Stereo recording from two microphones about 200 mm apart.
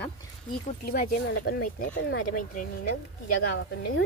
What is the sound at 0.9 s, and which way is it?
A child's voice, 45° left (ahead or behind).